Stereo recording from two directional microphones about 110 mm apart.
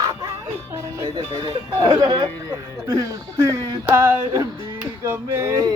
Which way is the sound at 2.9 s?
30° right (ahead or behind).